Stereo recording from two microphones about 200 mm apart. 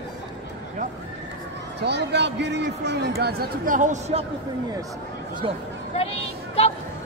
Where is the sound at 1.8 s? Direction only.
55° right (ahead or behind); by 4.2 s 40° right (ahead or behind).